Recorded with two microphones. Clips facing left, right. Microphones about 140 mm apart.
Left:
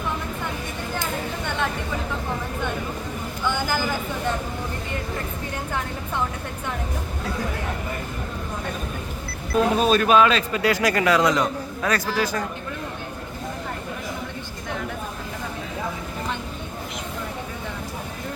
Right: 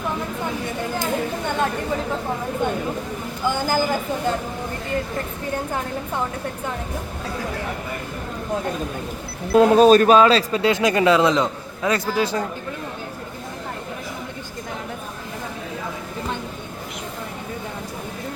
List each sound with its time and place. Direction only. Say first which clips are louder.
3.4 s speech: right 4 dB; 40° right (ahead or behind)
9.6 s speech: right 7 dB; 40° right (ahead or behind)